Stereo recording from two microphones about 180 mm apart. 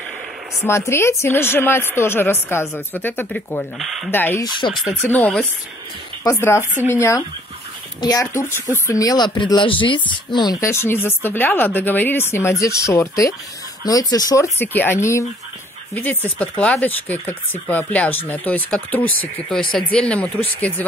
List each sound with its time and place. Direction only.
0.6 s speech: 15° left (ahead or behind)
4.1 s speech: 10° left (ahead or behind)
6.6 s speech: 10° right (ahead or behind)
6.9 s speech: 15° left (ahead or behind)